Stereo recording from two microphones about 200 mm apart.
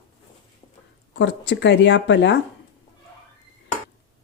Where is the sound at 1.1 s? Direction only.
60° left (ahead or behind).